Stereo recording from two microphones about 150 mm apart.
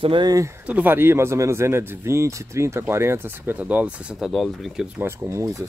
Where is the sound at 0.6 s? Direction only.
10° right (ahead or behind).